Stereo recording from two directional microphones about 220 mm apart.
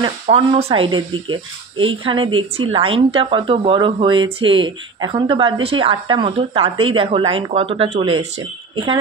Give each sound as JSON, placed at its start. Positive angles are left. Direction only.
{"t": 0.0, "sound": "speech", "side_deg": -25}